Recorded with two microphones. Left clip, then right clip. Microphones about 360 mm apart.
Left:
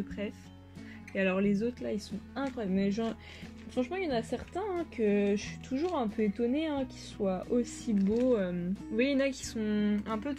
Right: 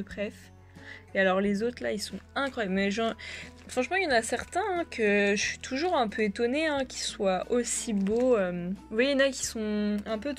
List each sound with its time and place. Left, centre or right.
1.1 s a woman's voice: centre